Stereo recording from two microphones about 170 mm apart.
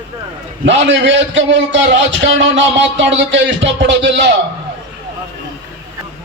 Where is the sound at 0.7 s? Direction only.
90° right.